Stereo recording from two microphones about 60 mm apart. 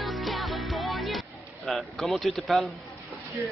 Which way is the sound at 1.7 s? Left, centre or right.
Centre.